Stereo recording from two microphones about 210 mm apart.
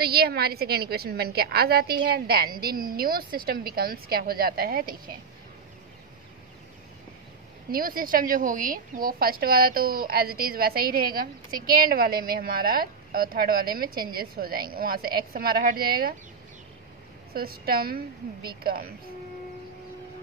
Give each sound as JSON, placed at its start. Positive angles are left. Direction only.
{"t": 0.0, "sound": "a woman's voice", "side_deg": -50}
{"t": 7.7, "sound": "a woman's voice", "side_deg": -45}
{"t": 17.3, "sound": "a woman's voice", "side_deg": -45}